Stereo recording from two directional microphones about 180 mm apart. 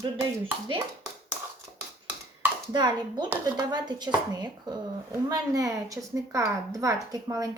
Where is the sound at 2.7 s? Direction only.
25° right (ahead or behind).